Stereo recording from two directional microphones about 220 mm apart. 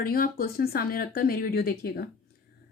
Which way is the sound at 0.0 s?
40° left (ahead or behind).